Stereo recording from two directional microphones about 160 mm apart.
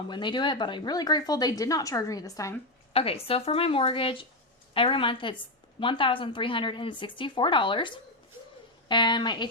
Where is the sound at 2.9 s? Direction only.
35° left (ahead or behind).